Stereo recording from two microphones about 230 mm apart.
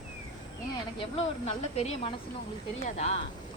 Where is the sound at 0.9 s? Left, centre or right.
Left.